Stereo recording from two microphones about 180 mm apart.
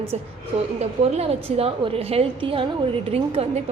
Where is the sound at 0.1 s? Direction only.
40° right (ahead or behind).